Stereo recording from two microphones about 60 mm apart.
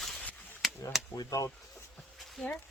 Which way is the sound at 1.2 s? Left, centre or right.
Left.